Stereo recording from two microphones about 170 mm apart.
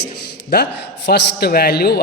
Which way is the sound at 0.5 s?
75° left (ahead or behind).